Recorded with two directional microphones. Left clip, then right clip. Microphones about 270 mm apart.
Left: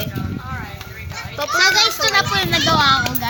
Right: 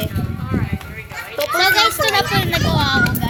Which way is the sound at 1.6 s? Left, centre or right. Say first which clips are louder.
Right 1 dB; centre.